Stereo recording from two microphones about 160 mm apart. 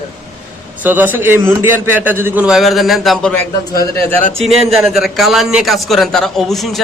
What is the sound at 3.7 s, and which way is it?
Speech, 20° left (ahead or behind).